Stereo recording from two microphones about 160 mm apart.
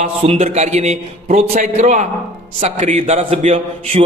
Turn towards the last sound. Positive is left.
turn(degrees=-40)  # may be behind; listen again after turning